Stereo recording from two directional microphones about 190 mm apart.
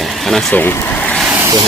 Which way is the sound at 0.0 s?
Centre (ahead or behind).